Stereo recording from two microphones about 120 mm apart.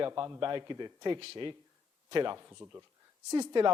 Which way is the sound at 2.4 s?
20° right (ahead or behind).